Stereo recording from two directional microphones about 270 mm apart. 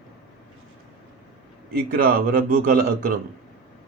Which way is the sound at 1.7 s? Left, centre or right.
Right.